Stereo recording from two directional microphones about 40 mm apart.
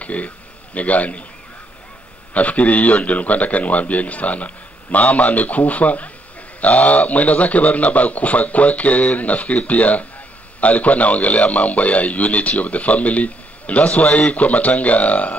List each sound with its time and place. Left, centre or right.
0.0 s a man's voice: left
2.3 s a man's voice: left